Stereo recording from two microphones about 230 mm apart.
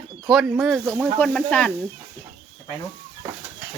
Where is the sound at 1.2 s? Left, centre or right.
Centre.